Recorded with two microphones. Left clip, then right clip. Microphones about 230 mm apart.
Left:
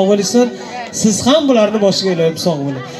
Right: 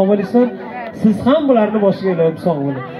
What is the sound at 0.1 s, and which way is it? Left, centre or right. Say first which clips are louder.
A man's voice: left 2 dB; left.